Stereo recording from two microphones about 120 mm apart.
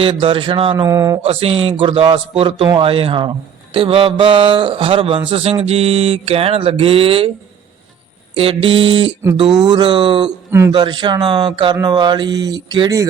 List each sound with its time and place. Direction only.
0.0 s a man's voice: 45° right (ahead or behind)
0.9 s speech: 25° right (ahead or behind)
1.2 s a man's voice: 50° right (ahead or behind)
8.4 s a man's voice: 50° right (ahead or behind); by 13.1 s 30° right (ahead or behind)